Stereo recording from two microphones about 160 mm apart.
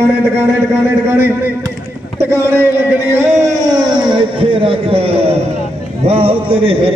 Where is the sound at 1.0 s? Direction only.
15° right (ahead or behind); by 6.9 s 35° right (ahead or behind).